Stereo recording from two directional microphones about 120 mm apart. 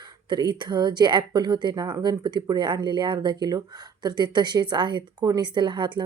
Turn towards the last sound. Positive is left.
turn(degrees=-40)  # may be behind; listen again after turning